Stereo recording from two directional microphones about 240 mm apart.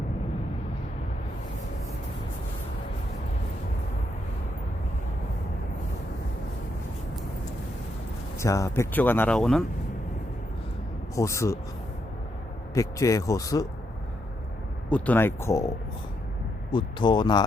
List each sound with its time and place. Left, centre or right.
8.4 s speech: centre
11.1 s speech: centre
12.7 s speech: centre
14.8 s speech: centre
16.7 s speech: centre